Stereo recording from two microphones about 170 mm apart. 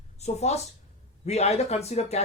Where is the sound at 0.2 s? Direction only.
40° left (ahead or behind).